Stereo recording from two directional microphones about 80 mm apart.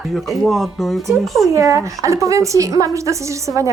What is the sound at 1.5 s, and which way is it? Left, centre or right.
A woman's voice, right.